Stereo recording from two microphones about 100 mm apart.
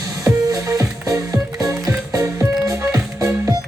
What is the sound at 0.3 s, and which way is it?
Music, 30° right (ahead or behind).